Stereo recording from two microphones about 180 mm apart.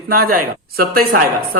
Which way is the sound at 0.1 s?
50° right (ahead or behind).